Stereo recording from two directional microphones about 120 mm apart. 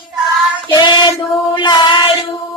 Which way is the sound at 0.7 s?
40° left (ahead or behind).